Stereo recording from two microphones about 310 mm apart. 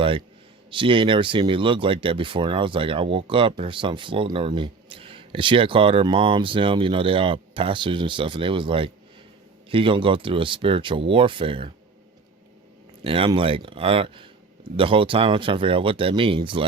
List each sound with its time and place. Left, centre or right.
0.7 s speech: centre
13.1 s speech: centre